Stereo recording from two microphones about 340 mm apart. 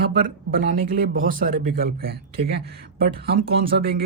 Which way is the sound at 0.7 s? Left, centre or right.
Right.